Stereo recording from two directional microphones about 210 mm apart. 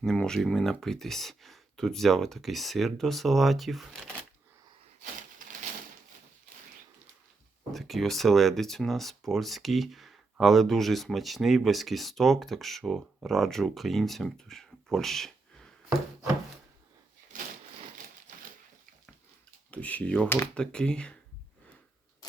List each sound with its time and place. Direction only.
0.0 s speech: 5° left (ahead or behind)
7.7 s speech: centre (ahead or behind)
17.3 s a sound: 40° right (ahead or behind)
19.7 s speech: 5° left (ahead or behind)